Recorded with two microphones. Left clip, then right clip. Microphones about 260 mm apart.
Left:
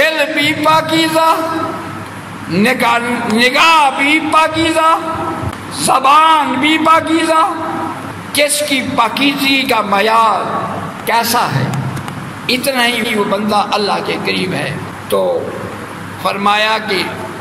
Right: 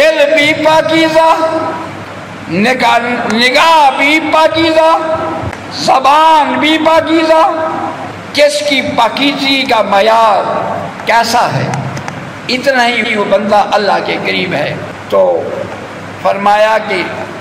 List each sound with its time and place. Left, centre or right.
0.0 s a sound: left
2.5 s a man's voice: left
16.3 s a man's voice: left